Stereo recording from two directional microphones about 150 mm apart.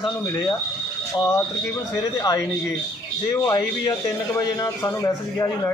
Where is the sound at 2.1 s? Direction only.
25° left (ahead or behind).